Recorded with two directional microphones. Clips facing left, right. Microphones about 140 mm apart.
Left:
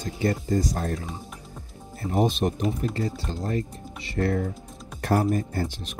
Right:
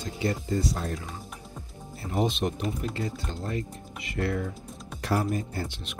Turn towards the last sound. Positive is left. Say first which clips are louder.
# left 5 dB
turn(degrees=45)  # may be behind; listen again after turning